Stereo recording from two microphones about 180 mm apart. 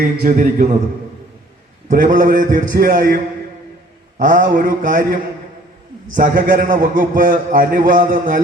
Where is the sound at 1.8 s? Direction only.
50° right (ahead or behind).